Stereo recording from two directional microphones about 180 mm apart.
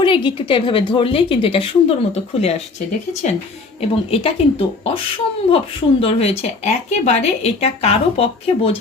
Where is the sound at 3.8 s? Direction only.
30° left (ahead or behind).